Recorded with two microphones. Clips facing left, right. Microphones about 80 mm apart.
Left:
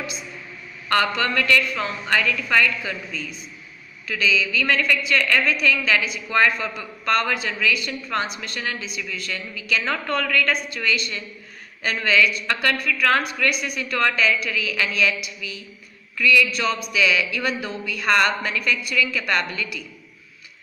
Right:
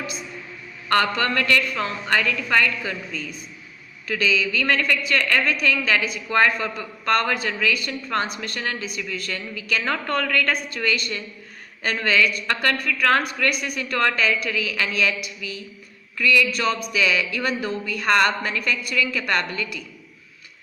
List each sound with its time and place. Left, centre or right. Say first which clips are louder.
0.9 s speech: right 1 dB; right